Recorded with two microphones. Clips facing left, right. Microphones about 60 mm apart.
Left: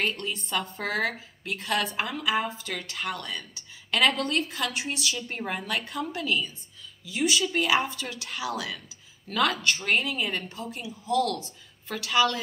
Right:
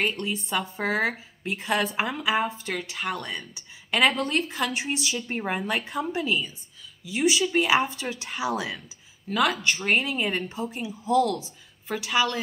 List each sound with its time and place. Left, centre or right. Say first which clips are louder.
0.0 s a woman's voice: right 2 dB; centre